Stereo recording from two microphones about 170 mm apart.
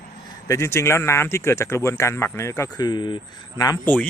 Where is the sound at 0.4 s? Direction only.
15° left (ahead or behind).